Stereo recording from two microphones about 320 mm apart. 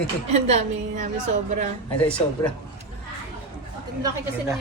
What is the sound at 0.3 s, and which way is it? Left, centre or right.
A woman's voice, centre.